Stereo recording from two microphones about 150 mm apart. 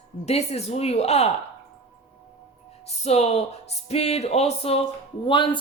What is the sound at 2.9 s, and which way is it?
Speech, 45° left (ahead or behind).